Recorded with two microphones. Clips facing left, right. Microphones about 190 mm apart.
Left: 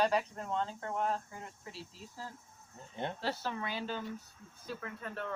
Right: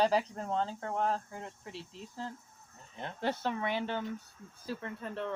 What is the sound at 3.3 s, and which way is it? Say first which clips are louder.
Speech: right 5 dB; 20° right (ahead or behind).